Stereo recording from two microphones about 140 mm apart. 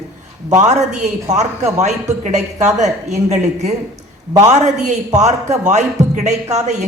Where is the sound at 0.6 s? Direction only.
55° right (ahead or behind).